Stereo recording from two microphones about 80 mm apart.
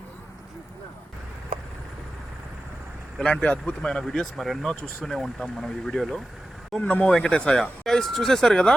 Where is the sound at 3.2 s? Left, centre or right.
Centre.